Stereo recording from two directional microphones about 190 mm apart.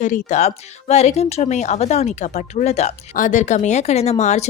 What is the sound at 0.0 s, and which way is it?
A woman's voice, 40° left (ahead or behind).